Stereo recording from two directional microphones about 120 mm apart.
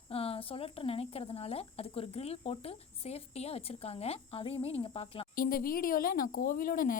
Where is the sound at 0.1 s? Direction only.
55° left (ahead or behind).